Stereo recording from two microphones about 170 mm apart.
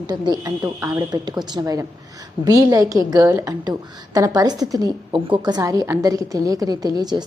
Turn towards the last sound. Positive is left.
turn(degrees=-25)  # may be behind; listen again after turning